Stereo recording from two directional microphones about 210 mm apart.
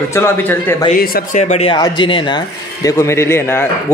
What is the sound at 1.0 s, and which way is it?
Speech, 45° left (ahead or behind).